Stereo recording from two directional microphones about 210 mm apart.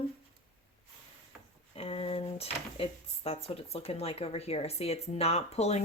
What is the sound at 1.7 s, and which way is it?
A woman's voice, 30° left (ahead or behind).